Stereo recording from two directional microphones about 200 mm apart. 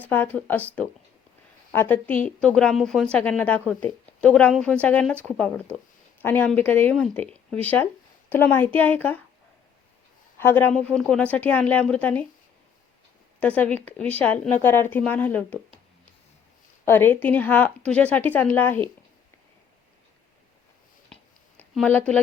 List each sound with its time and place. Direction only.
0.1 s a woman's voice: 10° left (ahead or behind)
1.7 s a woman's voice: 10° left (ahead or behind)
10.4 s a woman's voice: 10° left (ahead or behind)
13.4 s a woman's voice: 5° left (ahead or behind)
16.8 s a woman's voice: 10° left (ahead or behind)
21.6 s speech: 10° left (ahead or behind)